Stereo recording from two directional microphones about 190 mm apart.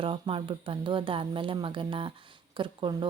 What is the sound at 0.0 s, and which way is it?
A woman's voice, 30° right (ahead or behind).